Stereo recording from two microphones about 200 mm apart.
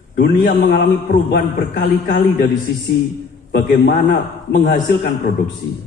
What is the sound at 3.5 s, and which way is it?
A man's voice, 50° left (ahead or behind).